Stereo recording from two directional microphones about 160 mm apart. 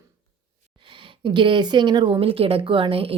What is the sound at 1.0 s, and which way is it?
Speech, 30° right (ahead or behind).